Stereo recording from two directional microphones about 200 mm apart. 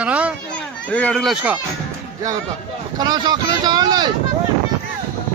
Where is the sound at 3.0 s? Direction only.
20° right (ahead or behind).